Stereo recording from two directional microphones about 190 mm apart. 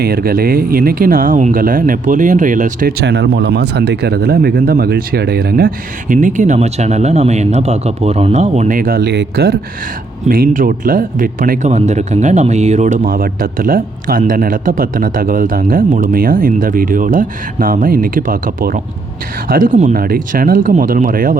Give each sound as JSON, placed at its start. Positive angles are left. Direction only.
{"t": 0.0, "sound": "speech", "side_deg": -55}
{"t": 3.0, "sound": "speech", "side_deg": -65}